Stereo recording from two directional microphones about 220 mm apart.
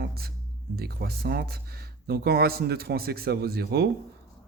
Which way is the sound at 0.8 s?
45° right (ahead or behind).